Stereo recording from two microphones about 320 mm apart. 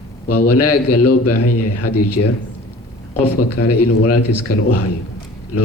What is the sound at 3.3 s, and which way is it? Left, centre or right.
Speech, left.